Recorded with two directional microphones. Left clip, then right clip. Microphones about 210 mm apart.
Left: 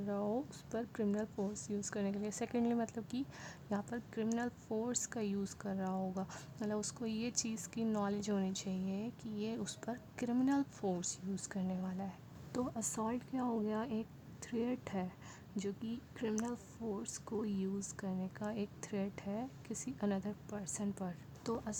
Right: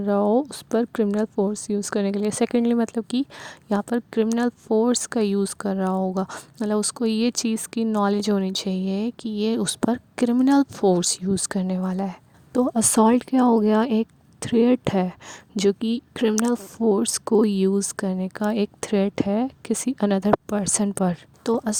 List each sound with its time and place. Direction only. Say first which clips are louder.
0.0 s speech: right 19 dB; 45° right (ahead or behind)